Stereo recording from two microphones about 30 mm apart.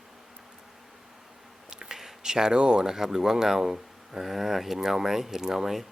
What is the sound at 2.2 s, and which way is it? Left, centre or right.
Speech, right.